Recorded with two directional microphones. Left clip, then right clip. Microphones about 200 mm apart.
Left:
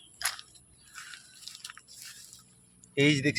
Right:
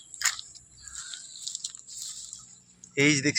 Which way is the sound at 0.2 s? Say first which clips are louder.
Right 5 dB; 40° left (ahead or behind).